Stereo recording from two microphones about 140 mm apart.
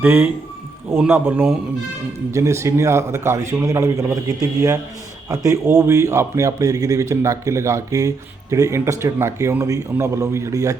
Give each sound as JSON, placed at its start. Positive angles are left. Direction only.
{"t": 0.0, "sound": "a man's voice", "side_deg": -15}